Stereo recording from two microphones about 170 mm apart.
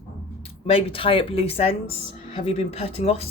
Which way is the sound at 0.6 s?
35° left (ahead or behind).